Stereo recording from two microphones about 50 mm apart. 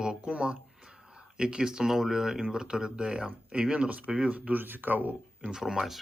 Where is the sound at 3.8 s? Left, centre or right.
Right.